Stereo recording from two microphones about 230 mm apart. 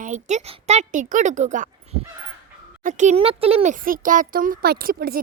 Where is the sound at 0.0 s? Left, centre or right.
Right.